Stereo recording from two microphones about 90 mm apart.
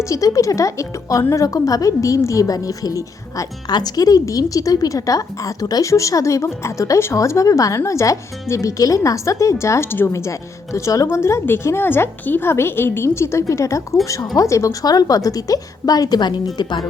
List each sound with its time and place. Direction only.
0.1 s speech: 40° left (ahead or behind)